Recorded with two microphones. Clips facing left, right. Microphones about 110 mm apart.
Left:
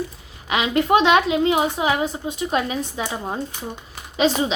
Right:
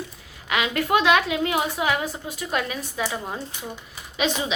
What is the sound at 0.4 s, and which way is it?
A woman's voice, 20° left (ahead or behind).